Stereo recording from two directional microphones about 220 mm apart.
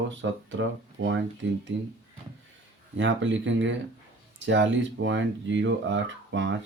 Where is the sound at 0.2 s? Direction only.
60° right (ahead or behind).